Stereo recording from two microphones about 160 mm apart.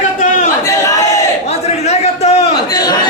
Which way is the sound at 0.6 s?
20° left (ahead or behind).